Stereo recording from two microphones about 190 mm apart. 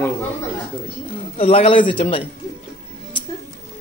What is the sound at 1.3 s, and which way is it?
Speech, 30° left (ahead or behind).